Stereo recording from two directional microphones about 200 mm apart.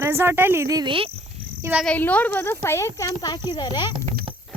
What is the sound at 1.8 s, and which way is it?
Speech, 5° left (ahead or behind).